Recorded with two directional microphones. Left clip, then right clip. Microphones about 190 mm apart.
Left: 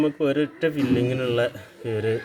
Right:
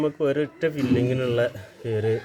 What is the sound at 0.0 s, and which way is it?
Speech, 5° right (ahead or behind).